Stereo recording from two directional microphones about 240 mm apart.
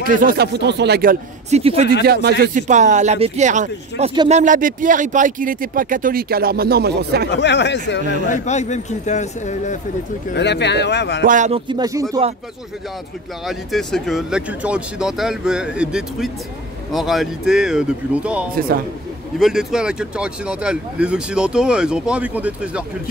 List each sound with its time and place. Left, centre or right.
0.0 s speech: right
1.5 s speech: right
2.0 s speech: right
4.1 s speech: centre
4.4 s speech: right
7.2 s speech: left
8.3 s a man's voice: left
10.3 s speech: left
11.2 s speech: right; by 12.3 s centre
13.5 s speech: centre